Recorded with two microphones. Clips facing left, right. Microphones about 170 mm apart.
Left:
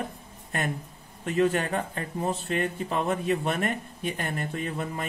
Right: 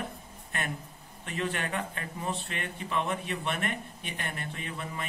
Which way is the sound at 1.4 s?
40° left (ahead or behind).